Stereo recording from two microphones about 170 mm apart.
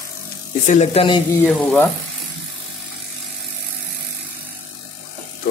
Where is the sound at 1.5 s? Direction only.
5° left (ahead or behind).